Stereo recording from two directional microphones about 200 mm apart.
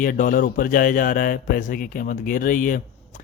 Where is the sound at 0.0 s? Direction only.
45° left (ahead or behind).